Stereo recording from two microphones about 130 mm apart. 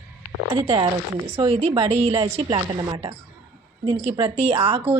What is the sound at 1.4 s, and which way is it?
Speech, 50° right (ahead or behind).